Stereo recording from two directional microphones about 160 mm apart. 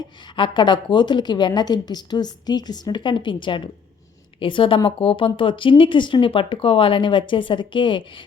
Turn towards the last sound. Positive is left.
turn(degrees=30)  # may be behind; listen again after turning